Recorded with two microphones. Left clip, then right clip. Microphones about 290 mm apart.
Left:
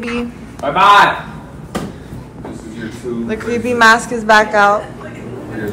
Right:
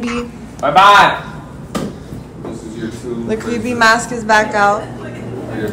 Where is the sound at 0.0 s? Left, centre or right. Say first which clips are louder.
Even; centre.